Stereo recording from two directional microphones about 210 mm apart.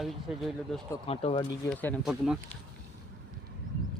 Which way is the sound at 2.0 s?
5° right (ahead or behind).